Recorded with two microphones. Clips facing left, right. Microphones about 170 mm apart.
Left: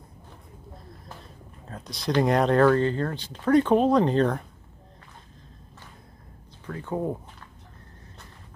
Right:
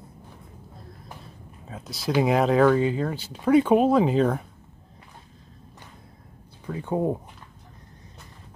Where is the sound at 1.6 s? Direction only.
5° right (ahead or behind).